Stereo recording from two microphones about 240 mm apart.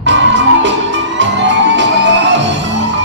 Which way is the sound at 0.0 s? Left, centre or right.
Right.